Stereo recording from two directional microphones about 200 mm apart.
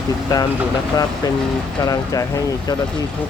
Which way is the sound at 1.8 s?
20° left (ahead or behind).